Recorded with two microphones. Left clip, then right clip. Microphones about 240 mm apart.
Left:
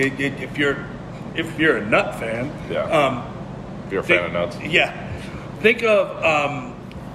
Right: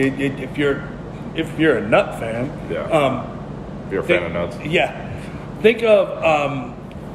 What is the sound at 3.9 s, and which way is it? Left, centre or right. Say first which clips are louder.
Speech: right 1 dB; centre.